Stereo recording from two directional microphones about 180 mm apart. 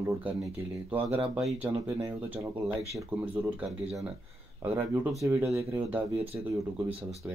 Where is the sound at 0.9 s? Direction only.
30° right (ahead or behind).